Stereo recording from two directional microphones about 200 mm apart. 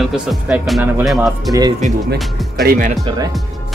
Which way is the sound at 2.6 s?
45° right (ahead or behind).